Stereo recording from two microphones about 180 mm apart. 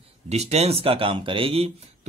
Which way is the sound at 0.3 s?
35° right (ahead or behind).